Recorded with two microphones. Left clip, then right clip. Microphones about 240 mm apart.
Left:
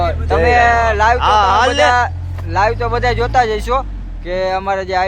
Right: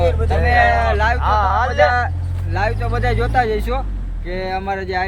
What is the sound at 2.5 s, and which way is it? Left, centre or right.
Speech, centre.